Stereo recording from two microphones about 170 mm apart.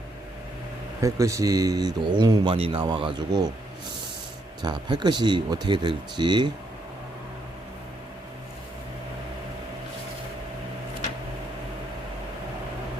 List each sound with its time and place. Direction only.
1.0 s speech: 20° right (ahead or behind)
4.6 s speech: 25° right (ahead or behind)